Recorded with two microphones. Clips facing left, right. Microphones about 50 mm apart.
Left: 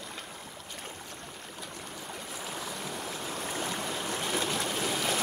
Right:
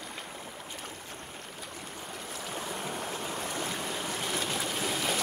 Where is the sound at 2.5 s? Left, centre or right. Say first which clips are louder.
Right 3 dB; right.